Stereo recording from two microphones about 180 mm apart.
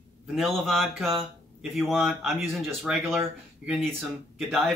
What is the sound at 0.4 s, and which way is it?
Speech, centre (ahead or behind).